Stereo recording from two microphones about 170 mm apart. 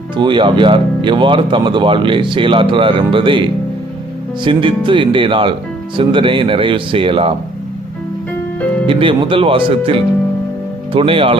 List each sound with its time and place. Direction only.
0.2 s speech: 30° right (ahead or behind)
4.4 s speech: 30° right (ahead or behind)
8.9 s speech: 30° right (ahead or behind)